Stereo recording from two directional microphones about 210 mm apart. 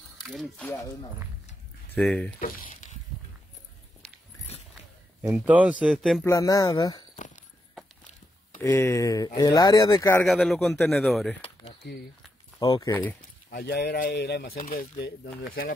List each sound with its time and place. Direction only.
0.2 s speech: centre (ahead or behind)
0.7 s speech: 15° left (ahead or behind)
2.0 s a man's voice: 5° left (ahead or behind)
2.4 s a sound: 40° left (ahead or behind)
5.2 s speech: 10° right (ahead or behind)
6.2 s speech: 15° left (ahead or behind)
7.2 s horse: 35° left (ahead or behind)
8.5 s speech: 10° left (ahead or behind)
10.2 s a man's voice: centre (ahead or behind)
12.5 s speech: 20° left (ahead or behind)
13.5 s speech: 45° left (ahead or behind)